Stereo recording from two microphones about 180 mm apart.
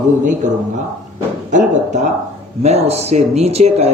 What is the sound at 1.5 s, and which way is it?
Speech, 40° right (ahead or behind).